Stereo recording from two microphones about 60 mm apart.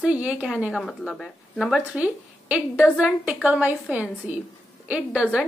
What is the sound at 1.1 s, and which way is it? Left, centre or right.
Speech, centre.